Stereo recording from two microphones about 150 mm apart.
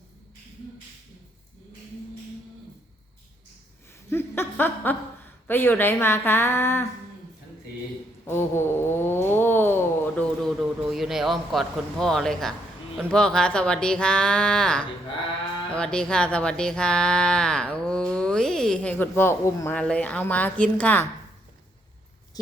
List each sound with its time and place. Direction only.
4.1 s chuckle: 15° left (ahead or behind)
5.5 s speech: 15° left (ahead or behind)
8.3 s speech: 15° left (ahead or behind)